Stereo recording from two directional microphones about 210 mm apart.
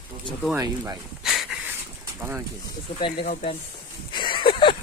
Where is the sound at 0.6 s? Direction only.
15° right (ahead or behind).